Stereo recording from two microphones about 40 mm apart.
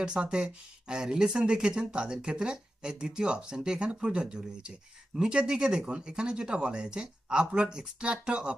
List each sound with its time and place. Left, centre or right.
0.0 s speech: right